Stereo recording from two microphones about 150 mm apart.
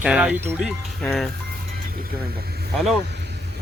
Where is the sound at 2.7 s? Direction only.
Centre (ahead or behind).